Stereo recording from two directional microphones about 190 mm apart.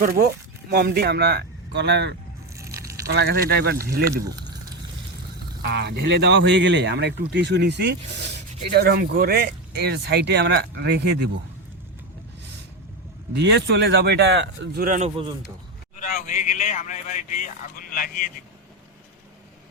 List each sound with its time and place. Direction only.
0.0 s speech: 55° right (ahead or behind)
4.2 s speech: 20° right (ahead or behind)
5.7 s speech: 60° right (ahead or behind)
13.3 s speech: 65° right (ahead or behind); by 15.1 s 40° right (ahead or behind)
16.0 s speech: 45° left (ahead or behind)